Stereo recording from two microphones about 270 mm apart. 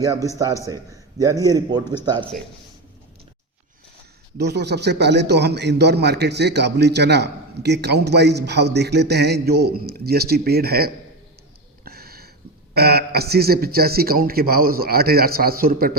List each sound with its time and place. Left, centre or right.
0.6 s a man's voice: centre
4.4 s a man's voice: right
11.9 s a sound: right
12.7 s a man's voice: right